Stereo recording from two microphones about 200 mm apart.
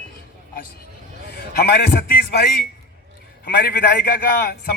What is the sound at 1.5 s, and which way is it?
A man's voice, 50° left (ahead or behind).